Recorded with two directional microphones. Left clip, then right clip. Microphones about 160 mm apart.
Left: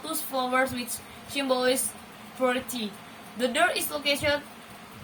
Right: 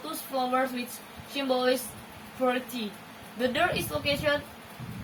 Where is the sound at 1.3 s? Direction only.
25° left (ahead or behind).